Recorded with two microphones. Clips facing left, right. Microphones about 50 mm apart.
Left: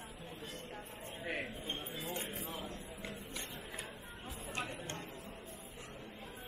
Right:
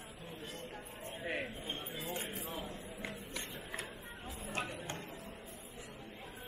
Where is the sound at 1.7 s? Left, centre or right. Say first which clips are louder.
Even; right.